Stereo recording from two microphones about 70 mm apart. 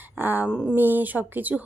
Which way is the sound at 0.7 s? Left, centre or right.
Right.